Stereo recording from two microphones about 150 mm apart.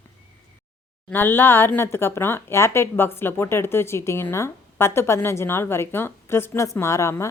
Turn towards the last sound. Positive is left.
turn(degrees=20)  # may be behind; listen again after turning